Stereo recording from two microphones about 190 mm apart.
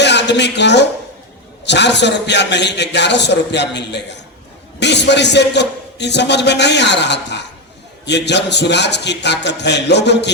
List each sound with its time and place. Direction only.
0.0 s a woman's voice: 65° left (ahead or behind)